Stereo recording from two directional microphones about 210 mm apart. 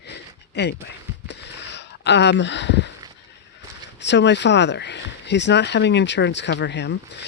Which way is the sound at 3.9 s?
55° left (ahead or behind).